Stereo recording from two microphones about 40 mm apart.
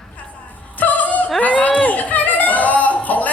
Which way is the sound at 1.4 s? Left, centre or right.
Left.